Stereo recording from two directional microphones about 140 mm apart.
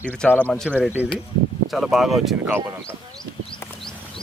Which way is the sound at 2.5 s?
15° right (ahead or behind).